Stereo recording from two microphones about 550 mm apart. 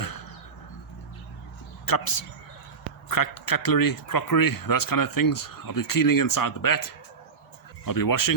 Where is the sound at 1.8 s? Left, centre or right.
Left.